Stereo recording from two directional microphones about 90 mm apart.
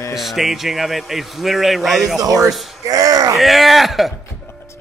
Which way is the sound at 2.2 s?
45° right (ahead or behind).